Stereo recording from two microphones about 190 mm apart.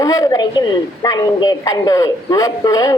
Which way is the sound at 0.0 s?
20° left (ahead or behind).